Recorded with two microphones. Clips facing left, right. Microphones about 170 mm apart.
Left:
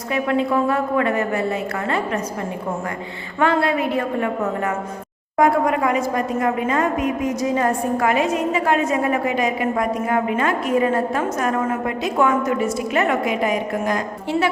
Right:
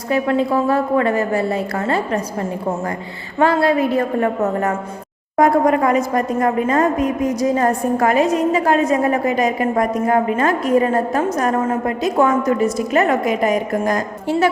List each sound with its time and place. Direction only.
0.1 s a woman's voice: 35° right (ahead or behind)
3.4 s a woman's voice: 35° right (ahead or behind)